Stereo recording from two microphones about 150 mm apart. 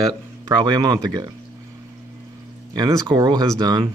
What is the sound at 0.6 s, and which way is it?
Speech, 30° right (ahead or behind).